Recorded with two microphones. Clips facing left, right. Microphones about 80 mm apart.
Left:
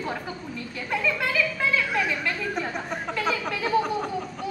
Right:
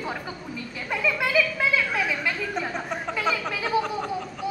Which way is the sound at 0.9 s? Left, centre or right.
Centre.